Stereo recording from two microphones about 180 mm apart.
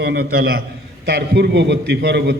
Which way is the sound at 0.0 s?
60° right (ahead or behind).